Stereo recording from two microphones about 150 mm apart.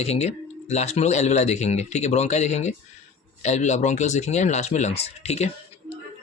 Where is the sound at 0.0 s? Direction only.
45° left (ahead or behind).